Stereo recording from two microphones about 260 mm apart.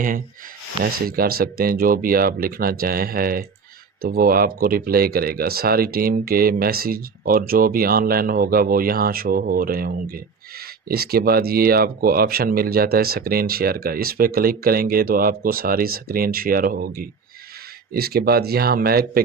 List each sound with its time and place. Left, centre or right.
0.9 s speech: right